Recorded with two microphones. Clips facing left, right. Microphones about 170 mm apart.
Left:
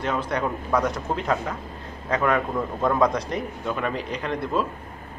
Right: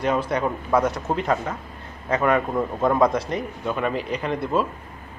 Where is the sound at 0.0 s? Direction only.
10° right (ahead or behind).